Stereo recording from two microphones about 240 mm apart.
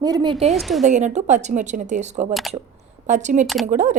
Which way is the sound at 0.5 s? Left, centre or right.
Centre.